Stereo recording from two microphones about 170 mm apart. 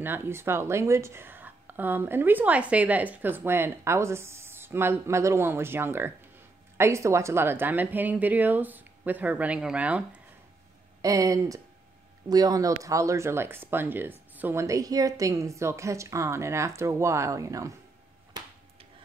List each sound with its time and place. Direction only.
0.0 s a woman's voice: 15° right (ahead or behind)
11.0 s a woman's voice: 20° right (ahead or behind)